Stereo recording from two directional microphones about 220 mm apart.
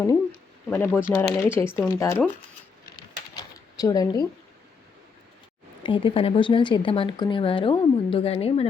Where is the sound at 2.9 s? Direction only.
15° left (ahead or behind).